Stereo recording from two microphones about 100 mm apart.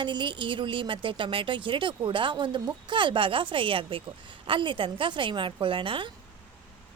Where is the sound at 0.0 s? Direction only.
50° right (ahead or behind).